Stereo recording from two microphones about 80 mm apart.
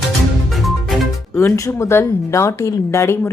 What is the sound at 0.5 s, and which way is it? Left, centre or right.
Music, centre.